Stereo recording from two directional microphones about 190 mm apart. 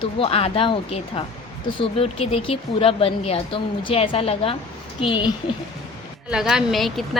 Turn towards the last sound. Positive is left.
turn(degrees=0)  # may be behind; listen again after turning